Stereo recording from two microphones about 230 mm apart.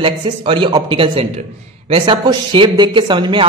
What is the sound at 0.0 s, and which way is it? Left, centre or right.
Speech, right.